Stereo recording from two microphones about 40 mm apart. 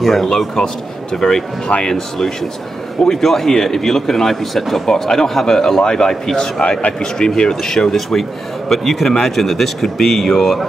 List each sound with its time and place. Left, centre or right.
0.0 s speech: centre
1.2 s speech: left